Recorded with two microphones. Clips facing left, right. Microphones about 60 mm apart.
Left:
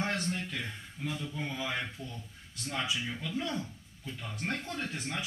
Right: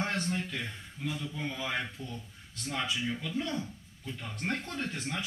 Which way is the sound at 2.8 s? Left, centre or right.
Centre.